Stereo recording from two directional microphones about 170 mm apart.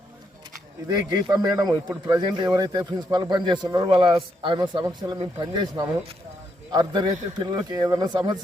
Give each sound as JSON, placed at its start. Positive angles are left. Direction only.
{"t": 1.1, "sound": "speech", "side_deg": -20}